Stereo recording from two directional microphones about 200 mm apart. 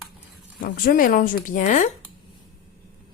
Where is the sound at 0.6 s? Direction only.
45° left (ahead or behind).